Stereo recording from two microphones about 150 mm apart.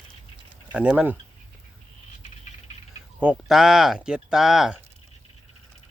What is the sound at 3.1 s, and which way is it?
Speech, 5° right (ahead or behind).